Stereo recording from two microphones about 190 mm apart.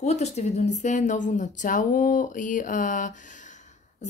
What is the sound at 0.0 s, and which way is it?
Speech, 35° left (ahead or behind).